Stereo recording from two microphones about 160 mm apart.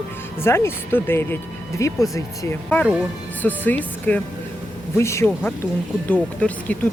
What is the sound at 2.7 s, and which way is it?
Speech, 10° left (ahead or behind).